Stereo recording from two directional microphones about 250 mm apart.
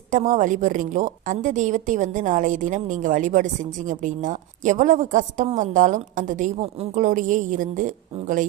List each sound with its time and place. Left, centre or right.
0.1 s a woman's voice: right